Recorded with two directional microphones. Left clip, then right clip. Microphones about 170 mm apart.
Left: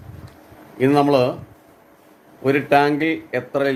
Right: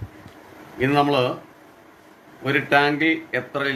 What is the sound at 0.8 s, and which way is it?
Speech, 65° left (ahead or behind).